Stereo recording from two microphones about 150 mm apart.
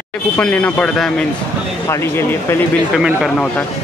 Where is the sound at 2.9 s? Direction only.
Centre (ahead or behind).